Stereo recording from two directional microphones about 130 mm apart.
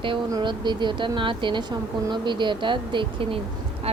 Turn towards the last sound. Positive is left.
turn(degrees=-40)  # may be behind; listen again after turning